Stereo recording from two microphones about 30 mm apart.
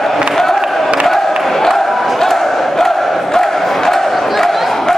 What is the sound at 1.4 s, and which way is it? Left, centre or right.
Crowd, centre.